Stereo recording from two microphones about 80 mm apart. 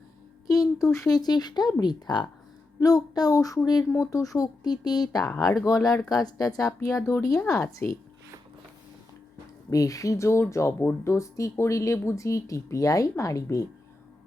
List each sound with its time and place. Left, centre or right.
0.5 s a sound: centre
0.9 s speech: left
2.8 s speech: left
9.6 s speech: left